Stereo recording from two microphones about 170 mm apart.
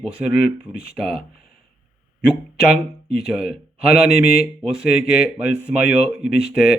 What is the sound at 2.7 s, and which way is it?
Speech, 5° right (ahead or behind).